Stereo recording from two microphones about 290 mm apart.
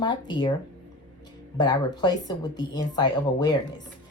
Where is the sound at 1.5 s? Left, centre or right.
Centre.